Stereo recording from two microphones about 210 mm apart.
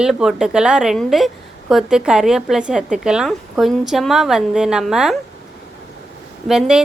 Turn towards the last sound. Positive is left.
turn(degrees=-5)  # may be behind; listen again after turning